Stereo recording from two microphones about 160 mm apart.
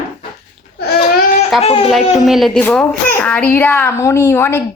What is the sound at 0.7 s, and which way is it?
Babbling, 80° left.